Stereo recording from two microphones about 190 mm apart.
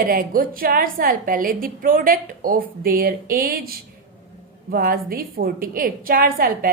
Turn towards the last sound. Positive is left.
turn(degrees=-50)  # may be behind; listen again after turning